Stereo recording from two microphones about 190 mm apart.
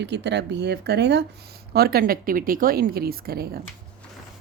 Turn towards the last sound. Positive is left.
turn(degrees=-55)  # may be behind; listen again after turning